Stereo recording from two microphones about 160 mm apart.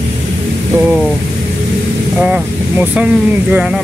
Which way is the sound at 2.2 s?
10° right (ahead or behind).